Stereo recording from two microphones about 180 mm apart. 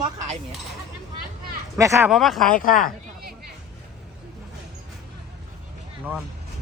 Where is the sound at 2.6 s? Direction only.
50° left (ahead or behind).